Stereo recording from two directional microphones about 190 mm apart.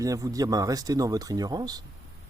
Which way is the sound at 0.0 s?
20° right (ahead or behind).